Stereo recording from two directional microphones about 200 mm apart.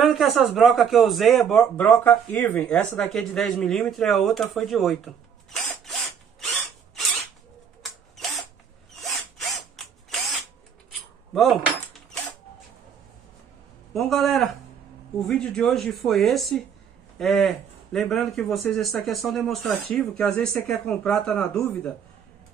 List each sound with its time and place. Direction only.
0.0 s a man's voice: centre (ahead or behind)
6.4 s tools: centre (ahead or behind)
9.0 s power tool: centre (ahead or behind)
11.3 s keys jangling: centre (ahead or behind)
13.9 s a man's voice: centre (ahead or behind)